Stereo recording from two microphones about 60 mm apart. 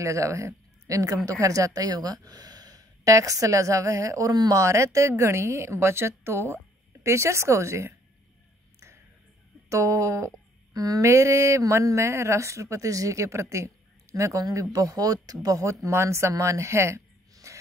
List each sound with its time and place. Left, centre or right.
0.0 s speech: right
8.7 s a sound: right
9.7 s speech: right
11.0 s speech: right
15.4 s speech: right